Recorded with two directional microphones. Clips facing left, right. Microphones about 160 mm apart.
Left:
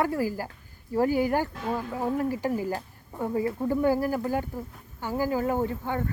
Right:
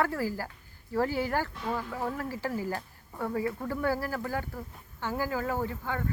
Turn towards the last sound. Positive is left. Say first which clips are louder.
# left 5 dB
turn(degrees=20)  # may be behind; listen again after turning